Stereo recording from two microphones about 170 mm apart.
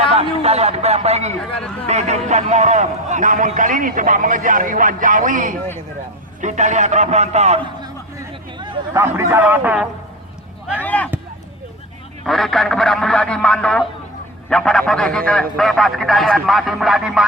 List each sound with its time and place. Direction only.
0.1 s a man's voice: 35° right (ahead or behind)
8.5 s chatter: 20° right (ahead or behind)
9.1 s a man's voice: 10° right (ahead or behind)
10.8 s speech: 10° left (ahead or behind)
12.2 s a man's voice: centre (ahead or behind)